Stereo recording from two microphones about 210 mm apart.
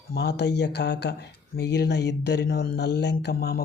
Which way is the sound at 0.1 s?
50° left (ahead or behind).